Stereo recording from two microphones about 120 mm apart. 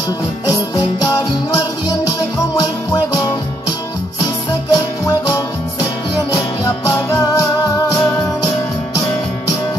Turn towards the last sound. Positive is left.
turn(degrees=30)  # may be behind; listen again after turning